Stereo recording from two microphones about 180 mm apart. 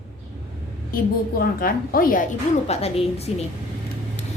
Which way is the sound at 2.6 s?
35° left (ahead or behind).